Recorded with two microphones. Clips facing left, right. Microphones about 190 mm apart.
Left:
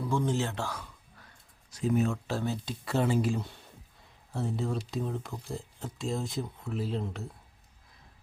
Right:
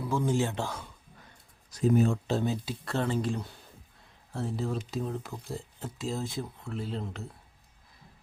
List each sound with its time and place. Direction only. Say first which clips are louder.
0.0 s speech: right 1 dB; 10° right (ahead or behind)
1.7 s speech: right 3 dB; 35° right (ahead or behind); by 2.6 s 20° right (ahead or behind)
2.6 s speech: left 2 dB; 5° left (ahead or behind)